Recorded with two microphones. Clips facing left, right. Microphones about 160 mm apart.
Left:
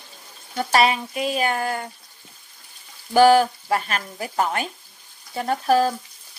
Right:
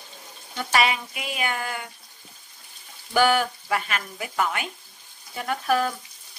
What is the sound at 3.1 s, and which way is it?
Stir, 35° left (ahead or behind).